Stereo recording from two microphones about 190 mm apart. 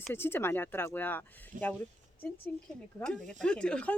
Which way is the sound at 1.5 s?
45° right (ahead or behind).